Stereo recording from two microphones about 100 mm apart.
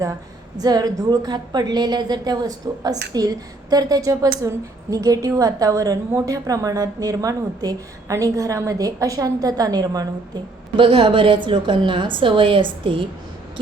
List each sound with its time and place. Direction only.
0.6 s a woman's voice: 40° right (ahead or behind)
10.8 s a woman's voice: 60° right (ahead or behind)